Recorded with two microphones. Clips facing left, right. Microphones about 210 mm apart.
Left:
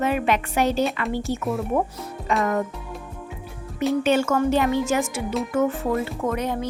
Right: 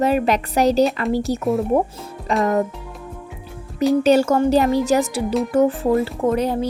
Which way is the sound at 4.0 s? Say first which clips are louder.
Right 5 dB; 35° right (ahead or behind).